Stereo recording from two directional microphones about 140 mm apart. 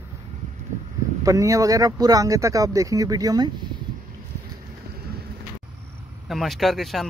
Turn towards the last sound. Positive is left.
turn(degrees=0)  # may be behind; listen again after turning